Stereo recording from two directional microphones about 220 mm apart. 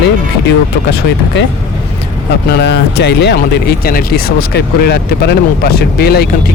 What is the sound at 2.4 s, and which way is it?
Speech, 50° left (ahead or behind).